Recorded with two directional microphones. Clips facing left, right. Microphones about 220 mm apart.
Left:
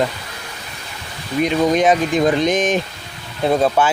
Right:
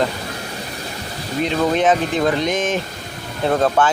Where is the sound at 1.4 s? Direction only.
15° left (ahead or behind).